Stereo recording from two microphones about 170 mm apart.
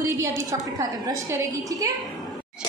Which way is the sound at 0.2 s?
20° right (ahead or behind).